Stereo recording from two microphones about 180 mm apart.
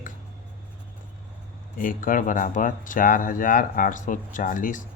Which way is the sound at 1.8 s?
50° left (ahead or behind).